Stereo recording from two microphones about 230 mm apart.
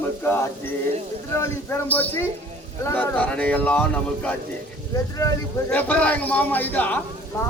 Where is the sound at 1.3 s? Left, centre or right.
Centre.